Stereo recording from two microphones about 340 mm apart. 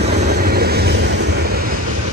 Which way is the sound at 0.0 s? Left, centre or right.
Right.